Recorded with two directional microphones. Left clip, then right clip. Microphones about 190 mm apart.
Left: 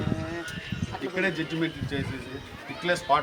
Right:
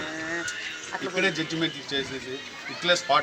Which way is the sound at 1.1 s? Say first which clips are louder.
Right 2 dB; 10° right (ahead or behind).